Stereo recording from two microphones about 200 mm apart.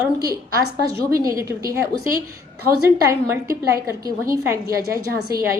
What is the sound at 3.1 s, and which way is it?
A woman's voice, 15° right (ahead or behind).